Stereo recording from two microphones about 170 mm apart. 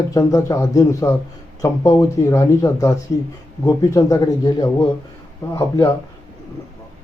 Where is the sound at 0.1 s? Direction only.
20° left (ahead or behind).